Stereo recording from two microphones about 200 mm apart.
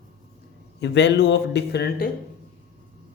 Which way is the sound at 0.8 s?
60° left (ahead or behind).